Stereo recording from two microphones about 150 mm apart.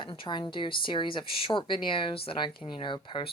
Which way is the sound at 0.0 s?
30° left (ahead or behind).